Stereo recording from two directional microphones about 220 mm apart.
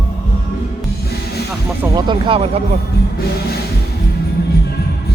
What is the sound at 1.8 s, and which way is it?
Speech, 20° right (ahead or behind).